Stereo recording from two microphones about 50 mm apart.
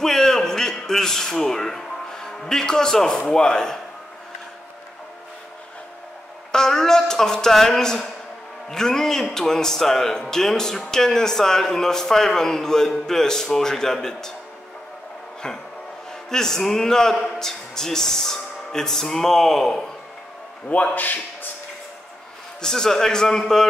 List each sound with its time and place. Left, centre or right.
0.0 s a sound: centre
6.5 s a man's voice: centre
15.4 s a man's voice: centre
20.6 s speech: left
22.6 s a man's voice: centre